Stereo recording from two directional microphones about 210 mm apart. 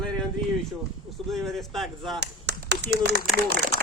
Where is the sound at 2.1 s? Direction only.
55° right (ahead or behind).